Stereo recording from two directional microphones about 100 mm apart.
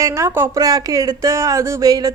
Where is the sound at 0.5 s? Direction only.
35° right (ahead or behind).